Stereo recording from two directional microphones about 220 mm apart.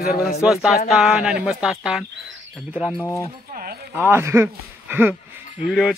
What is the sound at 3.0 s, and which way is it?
Speech, 15° left (ahead or behind).